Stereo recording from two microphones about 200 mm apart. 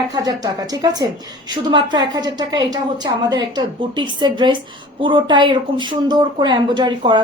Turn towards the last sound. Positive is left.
turn(degrees=-25)  # may be behind; listen again after turning